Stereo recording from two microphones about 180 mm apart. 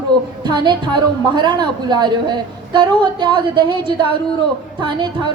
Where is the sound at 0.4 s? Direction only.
25° right (ahead or behind).